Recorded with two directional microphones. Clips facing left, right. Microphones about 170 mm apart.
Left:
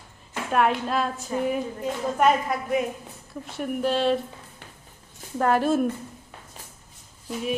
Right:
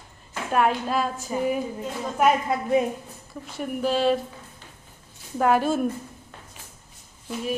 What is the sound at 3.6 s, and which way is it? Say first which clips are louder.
Music: even; centre (ahead or behind).